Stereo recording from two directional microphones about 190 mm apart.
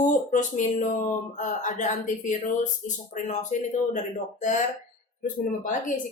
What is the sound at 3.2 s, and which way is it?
Speech, 40° left (ahead or behind).